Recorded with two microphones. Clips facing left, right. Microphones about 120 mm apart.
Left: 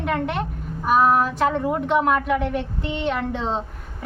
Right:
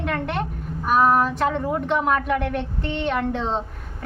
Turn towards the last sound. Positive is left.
turn(degrees=5)  # may be behind; listen again after turning